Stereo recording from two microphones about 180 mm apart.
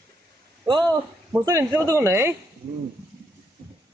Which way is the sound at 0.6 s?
25° right (ahead or behind).